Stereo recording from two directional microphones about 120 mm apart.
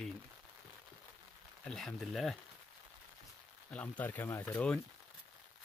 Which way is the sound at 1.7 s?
5° left (ahead or behind).